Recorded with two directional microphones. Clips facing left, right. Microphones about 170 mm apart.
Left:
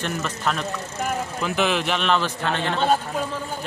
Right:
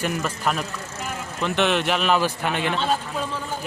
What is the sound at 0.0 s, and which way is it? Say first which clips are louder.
Speech: right 1 dB; 5° right (ahead or behind).